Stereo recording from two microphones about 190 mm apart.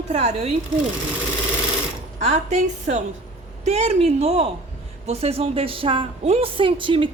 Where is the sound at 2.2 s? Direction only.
35° right (ahead or behind).